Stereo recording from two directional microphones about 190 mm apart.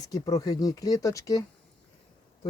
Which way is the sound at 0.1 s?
20° left (ahead or behind).